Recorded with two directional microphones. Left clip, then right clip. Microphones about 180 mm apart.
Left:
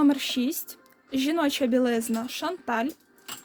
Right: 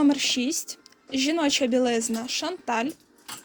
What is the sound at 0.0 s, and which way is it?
A woman's voice, 25° left (ahead or behind).